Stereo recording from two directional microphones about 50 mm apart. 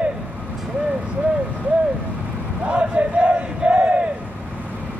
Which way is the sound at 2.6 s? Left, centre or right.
Right.